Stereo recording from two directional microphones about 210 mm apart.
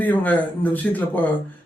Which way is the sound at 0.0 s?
10° left (ahead or behind).